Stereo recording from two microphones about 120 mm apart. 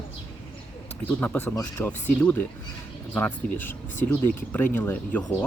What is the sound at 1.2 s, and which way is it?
Speech, 15° left (ahead or behind).